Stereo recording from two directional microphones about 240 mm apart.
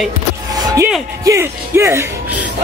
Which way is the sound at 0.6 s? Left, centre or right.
Centre.